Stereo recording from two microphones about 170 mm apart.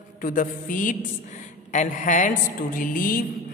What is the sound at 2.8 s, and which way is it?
Music, 55° left (ahead or behind).